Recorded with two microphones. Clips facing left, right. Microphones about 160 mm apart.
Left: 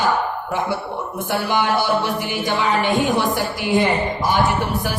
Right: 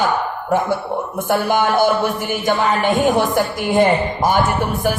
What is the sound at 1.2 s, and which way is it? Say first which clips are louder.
Speech: right 3 dB; 50° right (ahead or behind).